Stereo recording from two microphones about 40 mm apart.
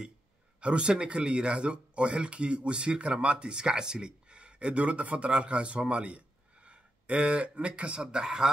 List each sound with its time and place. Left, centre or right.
0.6 s speech: right